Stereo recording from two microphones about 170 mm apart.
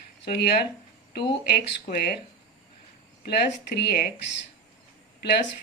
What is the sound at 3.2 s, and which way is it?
Speech, 75° left (ahead or behind).